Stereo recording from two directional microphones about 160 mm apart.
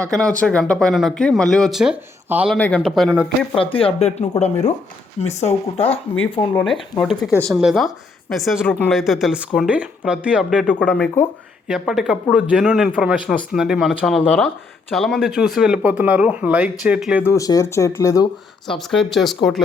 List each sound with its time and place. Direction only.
0.1 s speech: 5° left (ahead or behind)
2.6 s speech: 10° left (ahead or behind)
3.5 s speech: 35° left (ahead or behind)
7.0 s speech: centre (ahead or behind)
7.3 s speech: 10° left (ahead or behind)
7.5 s speech: centre (ahead or behind)
10.8 s speech: 5° left (ahead or behind)
17.2 s speech: 20° left (ahead or behind)
18.7 s speech: centre (ahead or behind)